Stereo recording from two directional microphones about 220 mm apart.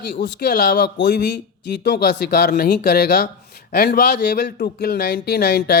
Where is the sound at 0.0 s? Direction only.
50° left (ahead or behind).